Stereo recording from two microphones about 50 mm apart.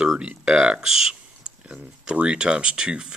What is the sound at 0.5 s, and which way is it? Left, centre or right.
Speech, right.